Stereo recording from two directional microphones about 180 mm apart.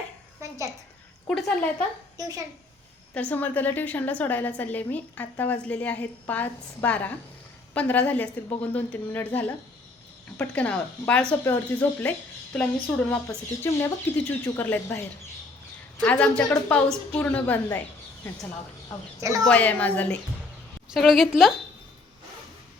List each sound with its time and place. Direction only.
1.3 s a woman's voice: 5° left (ahead or behind)
2.1 s a child's voice: 20° right (ahead or behind)
3.2 s a woman's voice: 10° left (ahead or behind)
19.2 s speech: 20° right (ahead or behind)
19.5 s a woman's voice: 10° left (ahead or behind)